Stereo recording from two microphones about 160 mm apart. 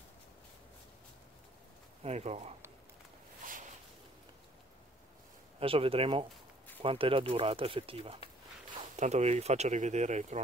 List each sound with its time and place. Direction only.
2.0 s speech: 45° right (ahead or behind)
5.6 s speech: 35° right (ahead or behind)
8.9 s speech: 45° right (ahead or behind)